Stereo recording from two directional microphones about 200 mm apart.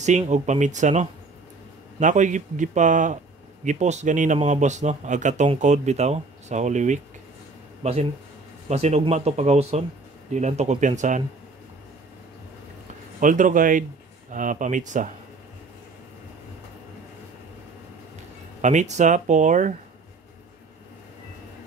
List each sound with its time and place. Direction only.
0.0 s speech: 35° right (ahead or behind)
13.2 s speech: 40° right (ahead or behind)
18.6 s speech: 35° right (ahead or behind)